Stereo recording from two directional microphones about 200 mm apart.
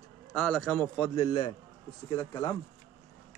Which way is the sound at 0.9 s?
25° left (ahead or behind).